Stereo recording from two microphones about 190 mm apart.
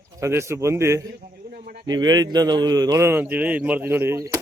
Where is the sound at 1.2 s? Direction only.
55° right (ahead or behind).